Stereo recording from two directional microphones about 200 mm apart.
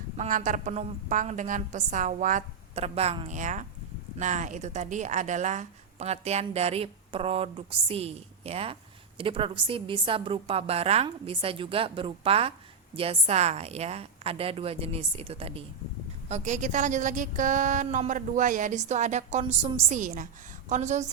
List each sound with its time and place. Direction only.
0.2 s a woman's voice: 40° right (ahead or behind)